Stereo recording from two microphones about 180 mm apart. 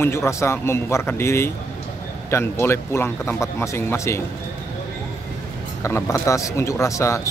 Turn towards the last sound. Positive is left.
turn(degrees=15)  # may be behind; listen again after turning